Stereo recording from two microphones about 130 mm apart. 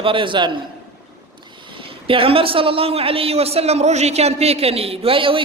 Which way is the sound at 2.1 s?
45° right (ahead or behind).